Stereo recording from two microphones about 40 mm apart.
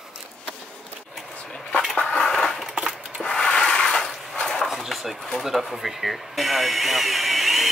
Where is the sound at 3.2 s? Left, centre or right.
Centre.